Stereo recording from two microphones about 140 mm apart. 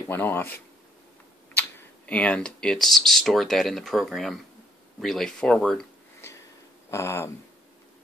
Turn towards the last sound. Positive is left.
turn(degrees=20)  # may be behind; listen again after turning